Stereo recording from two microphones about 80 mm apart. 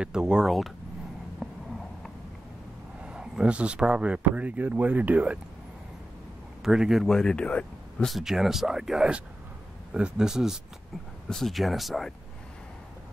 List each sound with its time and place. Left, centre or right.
0.0 s speech: centre
1.4 s a sound: centre
3.0 s speech: centre
6.6 s speech: centre
8.1 s speech: centre
11.2 s speech: centre